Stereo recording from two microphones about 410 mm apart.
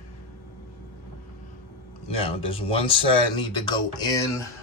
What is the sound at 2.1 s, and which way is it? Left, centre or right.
Speech, centre.